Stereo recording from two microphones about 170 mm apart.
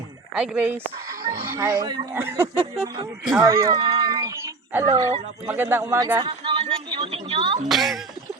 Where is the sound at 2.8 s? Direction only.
25° right (ahead or behind).